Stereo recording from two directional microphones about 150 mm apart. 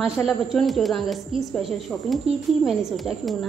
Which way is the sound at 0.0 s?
Centre (ahead or behind).